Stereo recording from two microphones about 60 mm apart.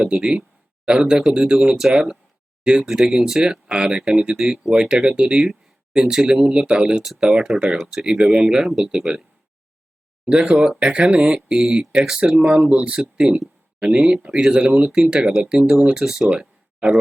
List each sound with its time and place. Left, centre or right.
0.0 s speech: centre
10.2 s speech: centre
16.3 s a sound: centre